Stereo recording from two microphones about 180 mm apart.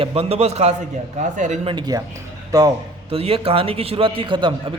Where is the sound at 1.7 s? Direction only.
25° right (ahead or behind).